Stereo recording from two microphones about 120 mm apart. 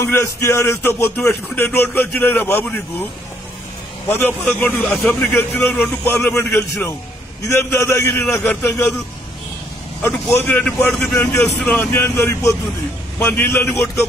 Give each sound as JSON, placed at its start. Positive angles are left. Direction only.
{"t": 0.1, "sound": "a man's voice", "side_deg": 20}
{"t": 4.1, "sound": "a man's voice", "side_deg": 20}
{"t": 10.0, "sound": "a man's voice", "side_deg": 20}